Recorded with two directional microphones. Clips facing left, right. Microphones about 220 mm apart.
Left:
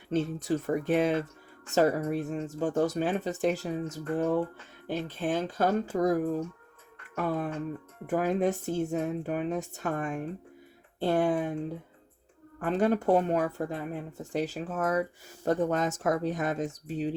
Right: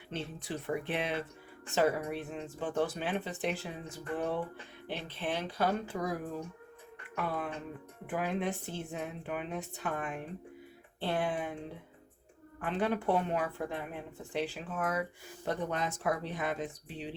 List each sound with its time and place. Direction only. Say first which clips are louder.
0.1 s speech: left 11 dB; 45° left (ahead or behind)
12.5 s speech: left 6 dB; 45° left (ahead or behind)